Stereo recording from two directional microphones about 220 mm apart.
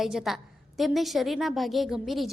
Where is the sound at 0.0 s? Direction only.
Centre (ahead or behind).